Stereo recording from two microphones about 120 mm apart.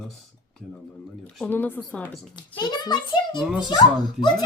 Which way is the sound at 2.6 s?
35° left (ahead or behind).